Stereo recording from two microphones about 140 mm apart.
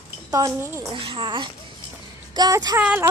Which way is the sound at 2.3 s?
30° right (ahead or behind).